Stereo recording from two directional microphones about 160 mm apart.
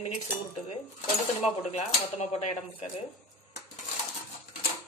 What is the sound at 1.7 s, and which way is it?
Speech, 40° left (ahead or behind).